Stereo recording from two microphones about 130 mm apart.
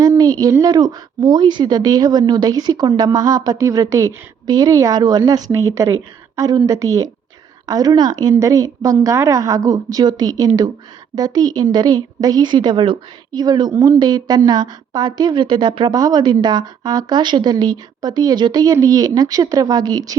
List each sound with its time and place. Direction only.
0.0 s a woman's voice: 25° right (ahead or behind)